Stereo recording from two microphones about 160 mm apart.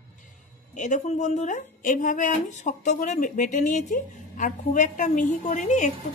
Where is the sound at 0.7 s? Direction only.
50° left (ahead or behind).